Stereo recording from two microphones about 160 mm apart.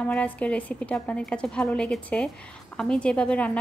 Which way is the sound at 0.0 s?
10° left (ahead or behind).